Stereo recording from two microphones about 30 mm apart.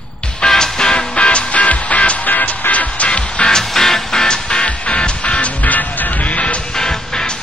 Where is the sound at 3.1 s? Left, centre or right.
Left.